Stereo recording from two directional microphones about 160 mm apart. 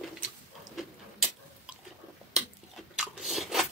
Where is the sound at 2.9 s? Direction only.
Centre (ahead or behind).